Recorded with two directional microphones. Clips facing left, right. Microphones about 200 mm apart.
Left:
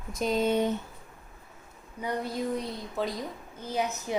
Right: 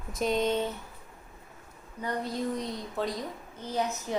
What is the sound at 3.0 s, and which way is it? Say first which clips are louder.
Speech: left 1 dB; centre (ahead or behind).